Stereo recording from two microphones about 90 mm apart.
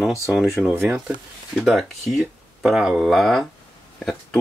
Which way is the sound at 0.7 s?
30° right (ahead or behind).